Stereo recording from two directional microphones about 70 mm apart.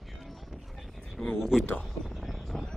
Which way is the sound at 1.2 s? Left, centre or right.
Centre.